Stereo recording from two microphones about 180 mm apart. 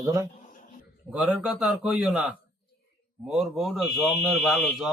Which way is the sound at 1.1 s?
5° right (ahead or behind).